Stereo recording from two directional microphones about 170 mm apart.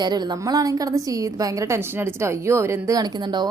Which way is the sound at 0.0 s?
25° right (ahead or behind).